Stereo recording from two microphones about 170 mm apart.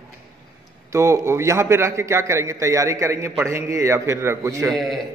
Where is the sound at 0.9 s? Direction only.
15° right (ahead or behind).